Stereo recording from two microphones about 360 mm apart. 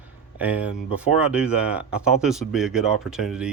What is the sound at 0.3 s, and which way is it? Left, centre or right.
Speech, centre.